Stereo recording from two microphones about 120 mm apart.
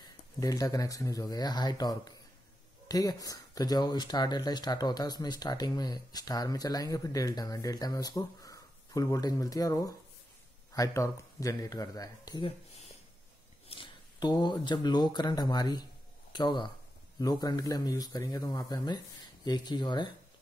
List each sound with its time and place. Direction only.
0.0 s speech: 30° left (ahead or behind)
12.4 s a sound: 65° left (ahead or behind)
13.7 s speech: 40° left (ahead or behind)